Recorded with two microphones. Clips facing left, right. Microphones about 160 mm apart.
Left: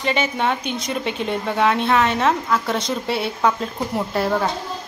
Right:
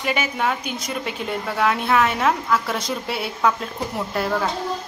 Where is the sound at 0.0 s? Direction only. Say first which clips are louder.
Left 2 dB; 10° right (ahead or behind).